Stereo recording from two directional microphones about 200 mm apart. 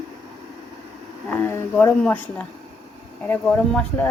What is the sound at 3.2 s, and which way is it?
Speech, 5° left (ahead or behind).